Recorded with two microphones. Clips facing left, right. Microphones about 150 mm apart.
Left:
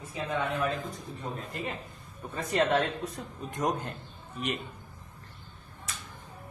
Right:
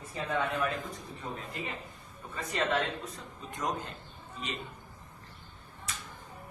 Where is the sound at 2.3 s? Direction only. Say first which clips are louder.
Left 5 dB; 55° left (ahead or behind).